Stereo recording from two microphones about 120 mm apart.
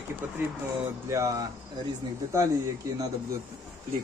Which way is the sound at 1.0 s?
25° right (ahead or behind).